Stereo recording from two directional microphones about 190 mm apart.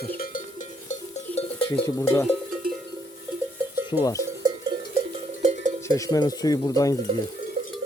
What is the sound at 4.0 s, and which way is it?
Cowbell, 15° left (ahead or behind).